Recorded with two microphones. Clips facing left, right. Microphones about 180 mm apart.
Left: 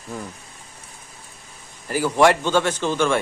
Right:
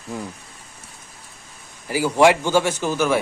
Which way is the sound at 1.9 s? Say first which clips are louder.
Right 1 dB; 10° right (ahead or behind).